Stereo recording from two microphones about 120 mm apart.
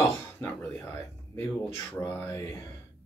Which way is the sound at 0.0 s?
20° left (ahead or behind).